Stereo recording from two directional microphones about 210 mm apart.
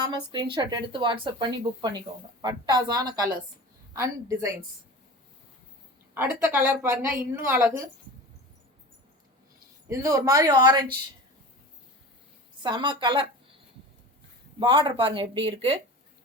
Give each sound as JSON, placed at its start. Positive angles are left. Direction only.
{"t": 0.0, "sound": "a woman's voice", "side_deg": -20}
{"t": 6.1, "sound": "a woman's voice", "side_deg": -10}
{"t": 9.9, "sound": "a woman's voice", "side_deg": -15}
{"t": 12.6, "sound": "a woman's voice", "side_deg": -20}
{"t": 14.6, "sound": "speech", "side_deg": -25}